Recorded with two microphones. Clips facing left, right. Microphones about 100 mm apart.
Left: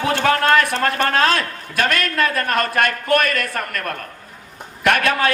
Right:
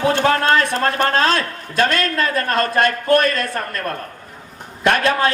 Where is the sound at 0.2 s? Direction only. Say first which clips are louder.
Even; 25° right (ahead or behind).